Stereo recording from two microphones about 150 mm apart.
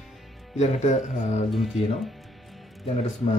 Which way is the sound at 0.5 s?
50° left (ahead or behind).